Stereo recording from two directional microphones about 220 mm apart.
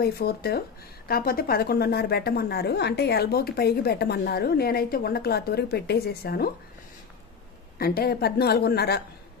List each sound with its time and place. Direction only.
0.0 s a woman's voice: 45° left (ahead or behind)
7.8 s a woman's voice: 45° left (ahead or behind)